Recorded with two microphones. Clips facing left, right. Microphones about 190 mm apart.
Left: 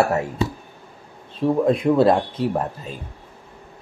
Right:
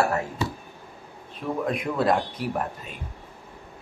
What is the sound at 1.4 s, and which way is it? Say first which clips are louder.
Speech: left 9 dB; 30° left (ahead or behind).